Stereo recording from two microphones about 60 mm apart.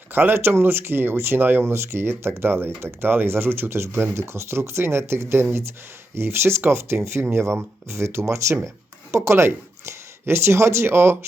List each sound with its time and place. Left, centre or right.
0.1 s speech: right